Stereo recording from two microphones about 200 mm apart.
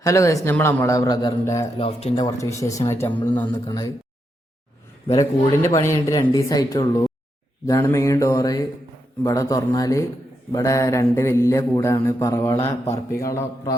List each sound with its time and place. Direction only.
0.0 s mantra: 15° left (ahead or behind)
1.8 s mantra: 30° left (ahead or behind)
5.1 s mantra: 15° left (ahead or behind)
5.8 s speech: 15° left (ahead or behind)
7.7 s mantra: 15° left (ahead or behind)